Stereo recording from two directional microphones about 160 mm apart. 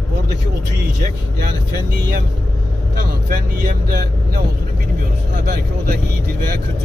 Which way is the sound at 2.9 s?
65° right (ahead or behind).